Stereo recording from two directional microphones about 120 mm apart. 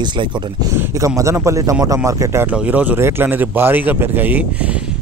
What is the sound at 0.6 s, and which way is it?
A man's voice, 25° right (ahead or behind).